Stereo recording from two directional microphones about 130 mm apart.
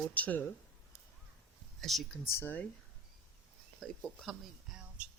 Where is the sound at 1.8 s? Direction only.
Centre (ahead or behind).